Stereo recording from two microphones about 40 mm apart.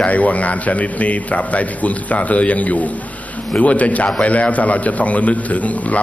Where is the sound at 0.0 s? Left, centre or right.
Left.